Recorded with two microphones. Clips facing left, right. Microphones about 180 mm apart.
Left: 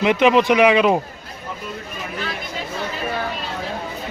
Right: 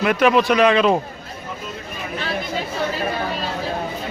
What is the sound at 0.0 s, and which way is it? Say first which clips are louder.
Speech: left 1 dB; 20° left (ahead or behind).